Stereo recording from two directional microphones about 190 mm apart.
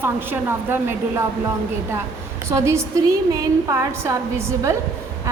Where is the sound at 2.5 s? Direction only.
15° right (ahead or behind).